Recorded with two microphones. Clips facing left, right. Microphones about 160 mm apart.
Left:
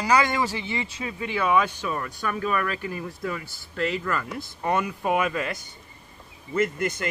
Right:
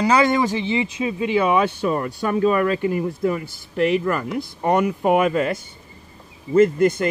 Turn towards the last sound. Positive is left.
turn(degrees=-30)  # may be behind; listen again after turning